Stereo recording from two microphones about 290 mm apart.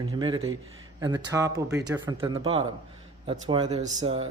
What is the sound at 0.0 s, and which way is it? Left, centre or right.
Speech, centre.